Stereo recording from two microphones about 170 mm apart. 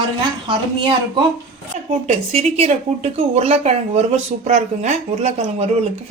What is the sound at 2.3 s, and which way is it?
A woman's voice, 35° right (ahead or behind).